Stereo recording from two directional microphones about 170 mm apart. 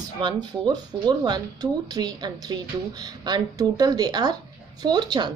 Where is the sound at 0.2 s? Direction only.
25° right (ahead or behind).